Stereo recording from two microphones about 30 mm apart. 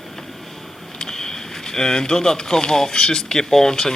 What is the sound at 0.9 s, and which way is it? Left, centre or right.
A man's voice, centre.